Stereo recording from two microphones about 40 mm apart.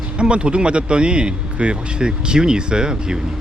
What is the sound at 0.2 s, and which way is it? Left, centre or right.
Speech, right.